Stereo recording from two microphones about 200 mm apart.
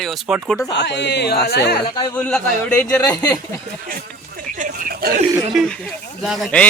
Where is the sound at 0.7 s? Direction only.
60° left (ahead or behind).